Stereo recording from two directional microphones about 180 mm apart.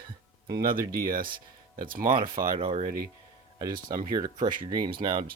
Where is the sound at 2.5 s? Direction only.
35° right (ahead or behind).